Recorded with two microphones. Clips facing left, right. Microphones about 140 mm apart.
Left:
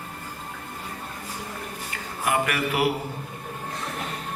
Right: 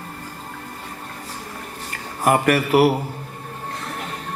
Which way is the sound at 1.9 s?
40° right (ahead or behind).